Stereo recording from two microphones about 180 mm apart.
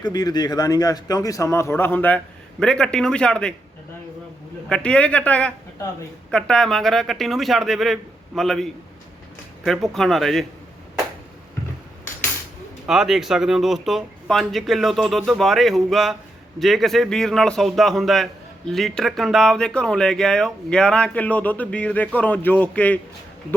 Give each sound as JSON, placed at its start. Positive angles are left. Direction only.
{"t": 0.0, "sound": "speech", "side_deg": 20}
{"t": 4.7, "sound": "speech", "side_deg": 5}
{"t": 12.9, "sound": "speech", "side_deg": 0}